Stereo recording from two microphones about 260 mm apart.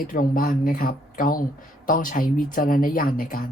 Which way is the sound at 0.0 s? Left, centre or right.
Left.